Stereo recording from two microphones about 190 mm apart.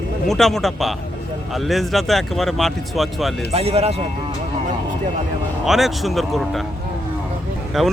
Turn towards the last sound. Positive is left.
turn(degrees=0)  # may be behind; listen again after turning